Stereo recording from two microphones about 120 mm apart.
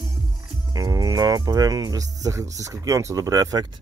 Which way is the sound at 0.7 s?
30° right (ahead or behind).